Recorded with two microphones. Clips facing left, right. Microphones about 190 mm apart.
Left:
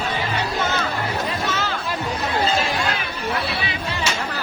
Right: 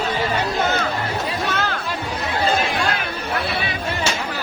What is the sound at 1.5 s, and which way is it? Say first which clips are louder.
Chatter: right 2 dB; 55° right (ahead or behind).